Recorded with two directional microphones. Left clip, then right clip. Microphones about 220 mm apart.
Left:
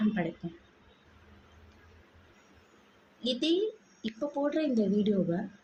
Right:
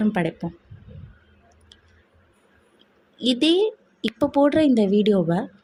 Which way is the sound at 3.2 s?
45° right (ahead or behind).